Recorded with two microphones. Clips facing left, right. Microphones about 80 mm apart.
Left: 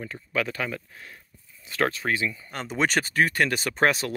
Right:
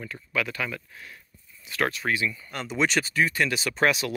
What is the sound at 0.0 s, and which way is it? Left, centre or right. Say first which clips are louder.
Speech: left 1 dB; left.